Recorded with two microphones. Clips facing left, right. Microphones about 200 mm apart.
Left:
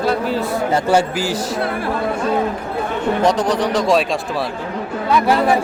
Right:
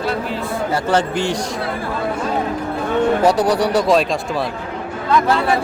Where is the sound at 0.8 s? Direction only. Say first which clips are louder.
Left 1 dB; 10° left (ahead or behind).